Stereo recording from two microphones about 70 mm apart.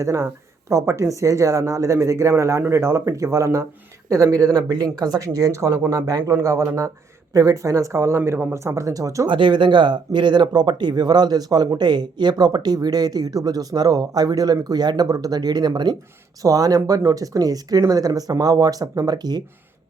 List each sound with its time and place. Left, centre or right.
0.0 s speech: right
4.1 s speech: right
6.1 s speech: right
6.3 s speech: right
9.2 s speech: right
16.4 s speech: right